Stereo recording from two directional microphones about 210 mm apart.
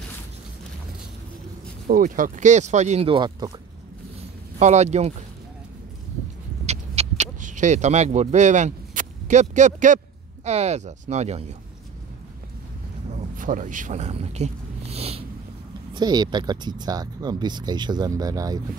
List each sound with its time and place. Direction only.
1.9 s speech: 40° right (ahead or behind); by 3.5 s 20° right (ahead or behind)
4.6 s speech: 35° right (ahead or behind)
6.6 s a sound: 30° right (ahead or behind)
10.4 s speech: 30° right (ahead or behind)
13.1 s a sound: 35° right (ahead or behind)
15.9 s speech: 20° right (ahead or behind)